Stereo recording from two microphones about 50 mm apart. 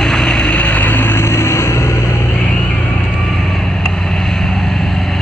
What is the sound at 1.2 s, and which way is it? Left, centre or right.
Vehicle, left.